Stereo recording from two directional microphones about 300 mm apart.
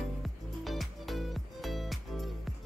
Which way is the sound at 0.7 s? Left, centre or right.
Centre.